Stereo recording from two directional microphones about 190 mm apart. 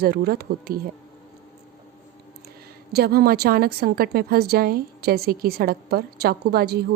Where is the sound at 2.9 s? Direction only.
55° right (ahead or behind).